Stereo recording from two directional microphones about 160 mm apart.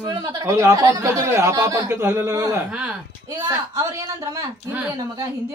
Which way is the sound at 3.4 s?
20° right (ahead or behind).